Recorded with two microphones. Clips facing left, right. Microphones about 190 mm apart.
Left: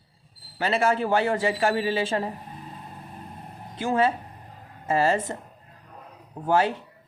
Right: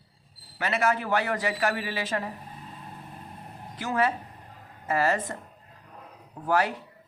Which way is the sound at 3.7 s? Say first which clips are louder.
Left 4 dB; 25° left (ahead or behind).